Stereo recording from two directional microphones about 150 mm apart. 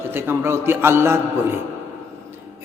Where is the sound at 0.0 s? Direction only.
15° right (ahead or behind).